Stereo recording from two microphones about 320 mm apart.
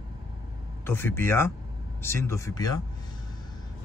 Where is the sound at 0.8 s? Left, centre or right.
Centre.